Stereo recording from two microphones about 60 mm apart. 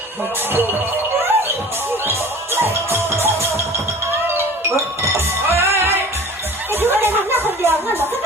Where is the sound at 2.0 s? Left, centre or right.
Right.